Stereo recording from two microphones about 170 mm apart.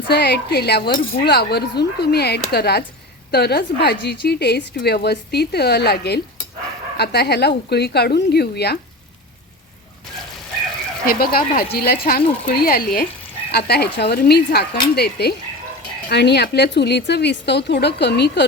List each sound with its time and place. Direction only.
0.1 s a woman's voice: 75° left (ahead or behind)
11.0 s a woman's voice: 60° left (ahead or behind); by 18.4 s 85° left